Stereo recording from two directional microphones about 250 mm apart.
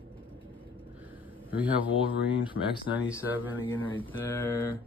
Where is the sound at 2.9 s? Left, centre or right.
Centre.